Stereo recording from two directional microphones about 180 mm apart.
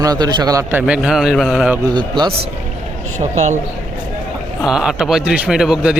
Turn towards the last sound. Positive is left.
turn(degrees=-5)  # may be behind; listen again after turning